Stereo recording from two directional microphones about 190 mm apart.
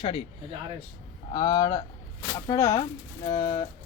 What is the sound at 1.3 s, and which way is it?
Speech, 20° left (ahead or behind).